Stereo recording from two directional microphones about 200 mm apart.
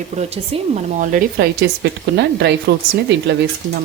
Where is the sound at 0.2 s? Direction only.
30° right (ahead or behind).